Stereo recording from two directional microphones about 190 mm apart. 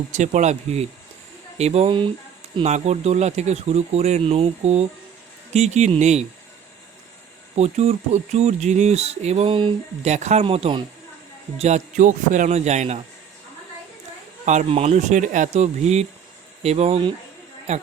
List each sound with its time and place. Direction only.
0.1 s speech: 40° right (ahead or behind)
7.5 s speech: 35° right (ahead or behind)
14.4 s speech: 40° right (ahead or behind)